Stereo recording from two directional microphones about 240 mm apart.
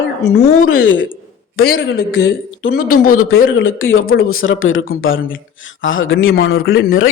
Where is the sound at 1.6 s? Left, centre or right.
Left.